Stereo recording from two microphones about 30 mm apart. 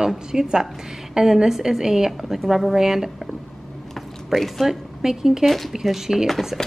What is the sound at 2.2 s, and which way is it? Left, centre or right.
Speech, centre.